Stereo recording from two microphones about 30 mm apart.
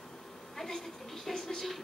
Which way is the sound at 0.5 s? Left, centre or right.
Centre.